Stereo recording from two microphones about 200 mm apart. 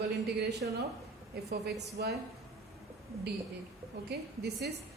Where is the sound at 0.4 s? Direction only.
55° right (ahead or behind).